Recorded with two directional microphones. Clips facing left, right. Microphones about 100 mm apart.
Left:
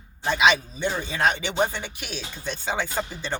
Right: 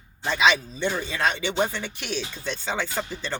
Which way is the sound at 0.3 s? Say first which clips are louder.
Left 1 dB; 15° left (ahead or behind).